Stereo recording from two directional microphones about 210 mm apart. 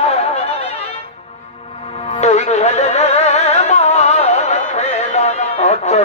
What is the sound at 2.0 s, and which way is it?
Music, 30° left (ahead or behind).